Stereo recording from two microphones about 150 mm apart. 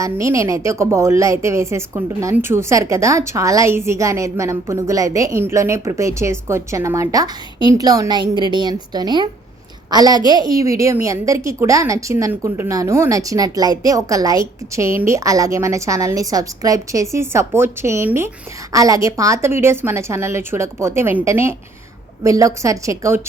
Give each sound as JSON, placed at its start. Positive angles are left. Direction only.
{"t": 0.0, "sound": "a woman's voice", "side_deg": -20}